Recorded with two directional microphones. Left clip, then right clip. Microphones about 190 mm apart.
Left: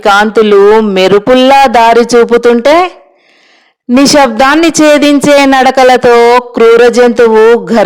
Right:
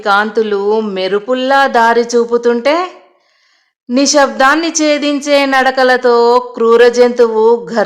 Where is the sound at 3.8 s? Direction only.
35° left (ahead or behind).